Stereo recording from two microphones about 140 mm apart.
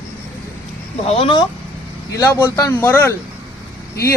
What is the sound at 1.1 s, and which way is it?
Speech, 40° left (ahead or behind).